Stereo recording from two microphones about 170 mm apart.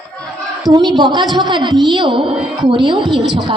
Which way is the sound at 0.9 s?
25° right (ahead or behind).